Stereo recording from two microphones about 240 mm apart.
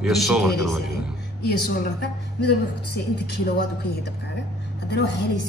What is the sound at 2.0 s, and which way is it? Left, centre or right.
A woman's voice, left.